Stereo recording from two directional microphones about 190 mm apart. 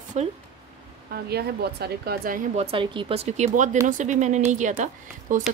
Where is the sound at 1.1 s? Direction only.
55° right (ahead or behind).